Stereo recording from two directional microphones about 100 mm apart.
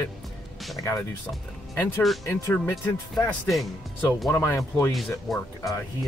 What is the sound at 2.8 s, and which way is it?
Speech, 30° left (ahead or behind).